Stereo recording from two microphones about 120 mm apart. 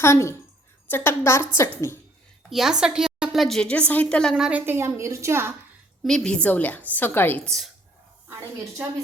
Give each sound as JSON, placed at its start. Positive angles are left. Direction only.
{"t": 0.0, "sound": "a woman's voice", "side_deg": 25}
{"t": 2.5, "sound": "a woman's voice", "side_deg": -5}
{"t": 4.4, "sound": "a woman's voice", "side_deg": -15}
{"t": 6.0, "sound": "a woman's voice", "side_deg": 5}